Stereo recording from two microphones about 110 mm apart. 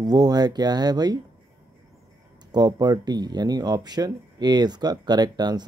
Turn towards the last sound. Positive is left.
turn(degrees=-40)  # may be behind; listen again after turning